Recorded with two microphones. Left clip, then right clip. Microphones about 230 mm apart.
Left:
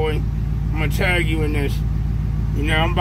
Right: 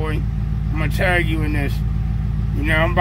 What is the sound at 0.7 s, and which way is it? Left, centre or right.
Speech, centre.